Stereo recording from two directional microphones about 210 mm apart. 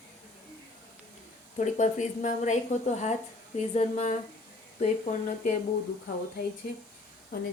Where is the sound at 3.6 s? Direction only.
30° left (ahead or behind).